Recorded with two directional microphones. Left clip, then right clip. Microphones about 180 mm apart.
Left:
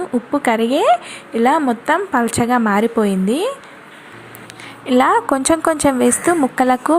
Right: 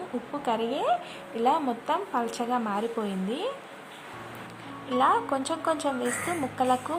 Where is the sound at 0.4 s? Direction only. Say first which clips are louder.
Left 12 dB; 20° left (ahead or behind).